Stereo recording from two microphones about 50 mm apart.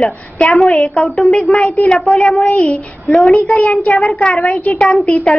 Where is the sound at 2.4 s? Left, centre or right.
Left.